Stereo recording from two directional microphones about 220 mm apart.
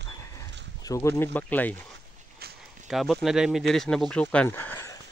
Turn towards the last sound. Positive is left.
turn(degrees=10)  # may be behind; listen again after turning